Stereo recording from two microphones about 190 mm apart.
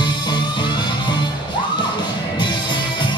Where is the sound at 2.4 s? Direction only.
25° left (ahead or behind).